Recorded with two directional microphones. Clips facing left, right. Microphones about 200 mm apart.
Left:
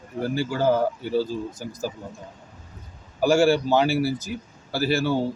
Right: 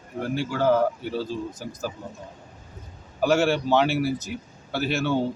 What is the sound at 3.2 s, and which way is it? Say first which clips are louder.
Speech: left 3 dB; 10° left (ahead or behind).